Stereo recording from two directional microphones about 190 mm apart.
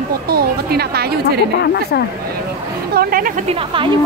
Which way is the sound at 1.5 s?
60° left (ahead or behind).